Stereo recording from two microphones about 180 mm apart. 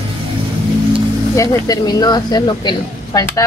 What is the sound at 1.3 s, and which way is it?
Speech, 20° left (ahead or behind).